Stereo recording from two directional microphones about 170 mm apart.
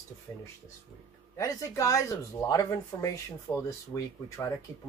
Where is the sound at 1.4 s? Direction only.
20° left (ahead or behind).